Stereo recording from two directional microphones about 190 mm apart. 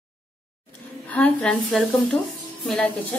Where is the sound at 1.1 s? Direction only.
5° left (ahead or behind).